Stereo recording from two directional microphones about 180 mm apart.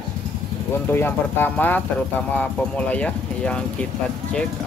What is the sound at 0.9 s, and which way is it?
Speech, 10° left (ahead or behind).